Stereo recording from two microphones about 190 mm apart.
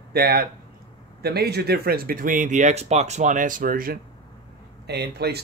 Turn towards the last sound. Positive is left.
turn(degrees=-60)  # may be behind; listen again after turning